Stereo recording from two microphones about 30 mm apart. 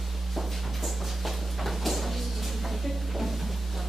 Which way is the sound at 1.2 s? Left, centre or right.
Centre.